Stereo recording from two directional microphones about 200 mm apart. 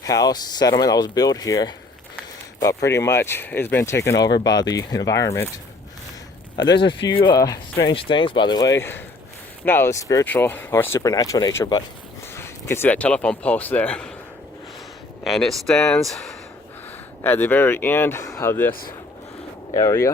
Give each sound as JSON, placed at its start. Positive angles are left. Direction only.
{"t": 0.0, "sound": "speech", "side_deg": 20}
{"t": 6.7, "sound": "speech", "side_deg": 25}
{"t": 8.8, "sound": "speech", "side_deg": 10}
{"t": 15.3, "sound": "speech", "side_deg": 0}
{"t": 19.7, "sound": "speech", "side_deg": 15}